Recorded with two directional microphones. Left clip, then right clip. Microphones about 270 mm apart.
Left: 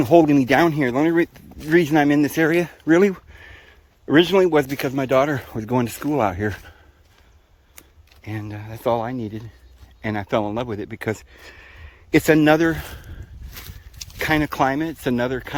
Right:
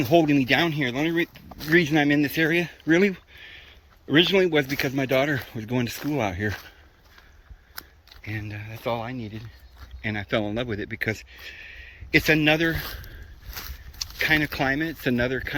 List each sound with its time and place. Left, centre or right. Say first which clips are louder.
0.0 s speech: left 5 dB; centre
8.2 s speech: left 2 dB; centre
12.1 s speech: left 4 dB; centre
14.2 s speech: left 3 dB; centre